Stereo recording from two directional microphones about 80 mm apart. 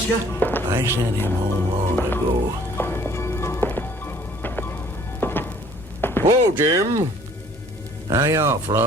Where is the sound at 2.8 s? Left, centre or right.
Left.